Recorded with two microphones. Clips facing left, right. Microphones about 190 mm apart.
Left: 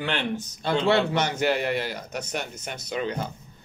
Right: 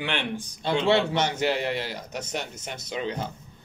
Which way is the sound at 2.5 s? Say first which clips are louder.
Left 1 dB; 25° right (ahead or behind).